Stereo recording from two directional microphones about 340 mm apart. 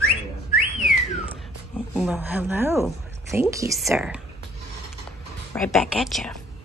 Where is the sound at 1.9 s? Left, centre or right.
Centre.